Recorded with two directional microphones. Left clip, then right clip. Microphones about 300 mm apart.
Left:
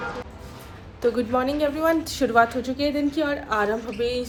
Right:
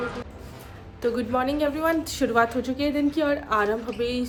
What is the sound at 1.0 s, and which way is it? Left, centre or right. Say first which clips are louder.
A woman's voice: left 2 dB; centre.